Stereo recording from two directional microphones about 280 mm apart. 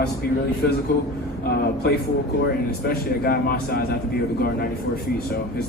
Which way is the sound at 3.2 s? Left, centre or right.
Left.